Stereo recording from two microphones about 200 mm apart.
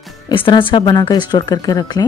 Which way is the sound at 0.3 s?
25° left (ahead or behind).